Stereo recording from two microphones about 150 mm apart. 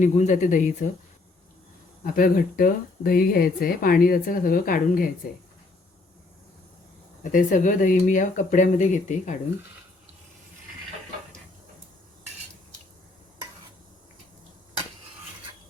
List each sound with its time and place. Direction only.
0.0 s speech: 55° left (ahead or behind)
2.1 s speech: 70° left (ahead or behind)
7.3 s speech: 60° left (ahead or behind)